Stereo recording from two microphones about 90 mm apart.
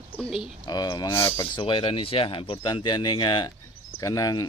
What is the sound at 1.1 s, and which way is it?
Speech, 30° left (ahead or behind).